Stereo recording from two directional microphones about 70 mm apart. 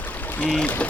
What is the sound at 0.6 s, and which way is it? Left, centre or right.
Speech, left.